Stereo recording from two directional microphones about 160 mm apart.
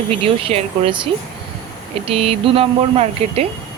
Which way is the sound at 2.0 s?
40° right (ahead or behind).